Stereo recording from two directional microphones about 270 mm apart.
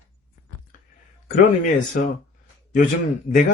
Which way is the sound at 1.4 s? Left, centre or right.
Left.